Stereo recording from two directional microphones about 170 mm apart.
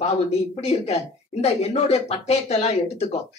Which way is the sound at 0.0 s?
40° left (ahead or behind).